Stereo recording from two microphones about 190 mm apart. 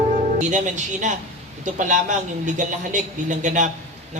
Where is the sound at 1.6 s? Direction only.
40° right (ahead or behind).